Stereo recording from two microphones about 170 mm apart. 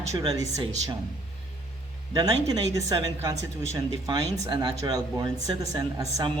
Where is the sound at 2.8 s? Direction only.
20° right (ahead or behind).